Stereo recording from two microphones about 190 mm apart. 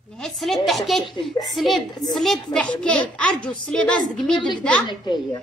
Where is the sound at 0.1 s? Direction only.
Centre (ahead or behind).